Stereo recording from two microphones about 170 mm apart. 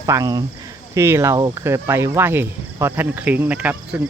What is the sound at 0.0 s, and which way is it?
Speech, 20° right (ahead or behind).